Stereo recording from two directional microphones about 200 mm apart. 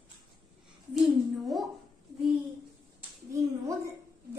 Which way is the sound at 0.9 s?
Centre (ahead or behind).